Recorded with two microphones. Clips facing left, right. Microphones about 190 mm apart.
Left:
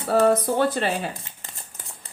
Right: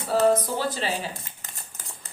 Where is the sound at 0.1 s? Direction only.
60° left (ahead or behind).